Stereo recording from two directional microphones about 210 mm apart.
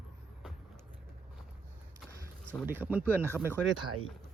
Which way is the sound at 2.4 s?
10° right (ahead or behind).